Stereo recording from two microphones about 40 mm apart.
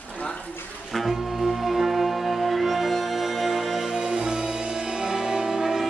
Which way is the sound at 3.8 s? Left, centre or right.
Centre.